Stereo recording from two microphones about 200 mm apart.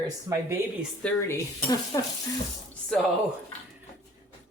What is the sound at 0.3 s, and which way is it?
Speech, 15° right (ahead or behind).